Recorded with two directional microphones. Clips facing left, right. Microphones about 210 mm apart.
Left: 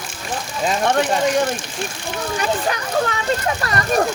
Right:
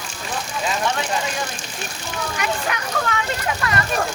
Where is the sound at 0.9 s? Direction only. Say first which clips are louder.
Left 7 dB; 55° left (ahead or behind).